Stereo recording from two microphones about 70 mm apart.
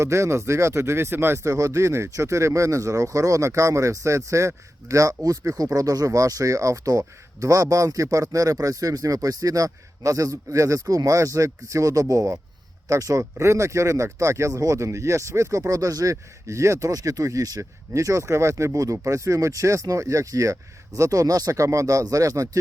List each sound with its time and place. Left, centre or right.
0.0 s speech: right